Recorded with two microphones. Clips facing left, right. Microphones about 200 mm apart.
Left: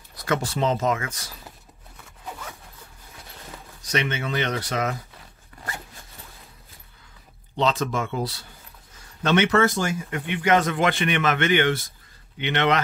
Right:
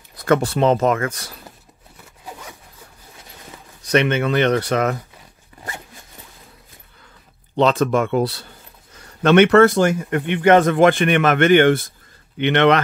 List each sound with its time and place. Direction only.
0.2 s speech: 55° right (ahead or behind)
3.8 s speech: 60° right (ahead or behind)
7.5 s speech: 60° right (ahead or behind)